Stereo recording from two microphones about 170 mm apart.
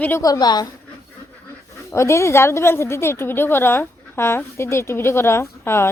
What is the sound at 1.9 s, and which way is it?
A woman's voice, 15° left (ahead or behind).